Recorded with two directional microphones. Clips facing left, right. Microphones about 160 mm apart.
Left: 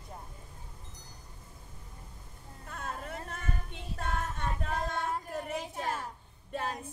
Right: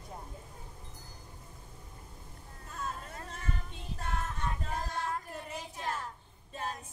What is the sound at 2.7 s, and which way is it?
Music, 60° left (ahead or behind).